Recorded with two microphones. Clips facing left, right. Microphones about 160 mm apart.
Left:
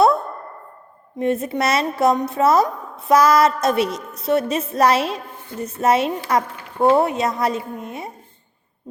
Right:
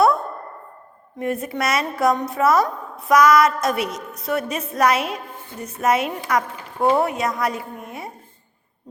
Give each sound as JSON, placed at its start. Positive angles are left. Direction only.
{"t": 1.2, "sound": "a woman's voice", "side_deg": 25}